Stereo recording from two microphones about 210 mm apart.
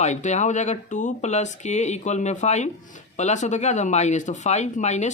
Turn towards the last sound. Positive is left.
turn(degrees=35)  # may be behind; listen again after turning